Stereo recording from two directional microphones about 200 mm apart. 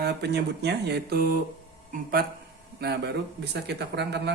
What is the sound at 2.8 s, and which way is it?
Speech, 55° right (ahead or behind).